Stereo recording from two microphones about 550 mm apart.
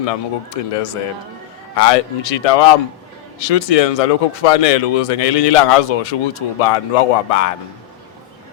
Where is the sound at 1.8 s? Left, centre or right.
Left.